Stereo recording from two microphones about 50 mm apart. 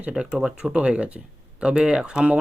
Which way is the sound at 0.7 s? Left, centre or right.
Right.